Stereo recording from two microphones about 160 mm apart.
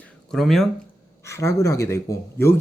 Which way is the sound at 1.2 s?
20° left (ahead or behind).